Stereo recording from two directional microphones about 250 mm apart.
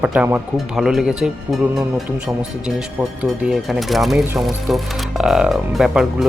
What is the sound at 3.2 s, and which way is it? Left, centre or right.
Speech, centre.